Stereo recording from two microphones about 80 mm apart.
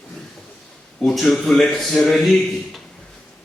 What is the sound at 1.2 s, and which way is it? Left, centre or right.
Speech, centre.